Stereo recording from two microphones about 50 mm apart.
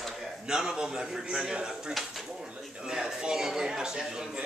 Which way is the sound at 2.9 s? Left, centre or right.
Centre.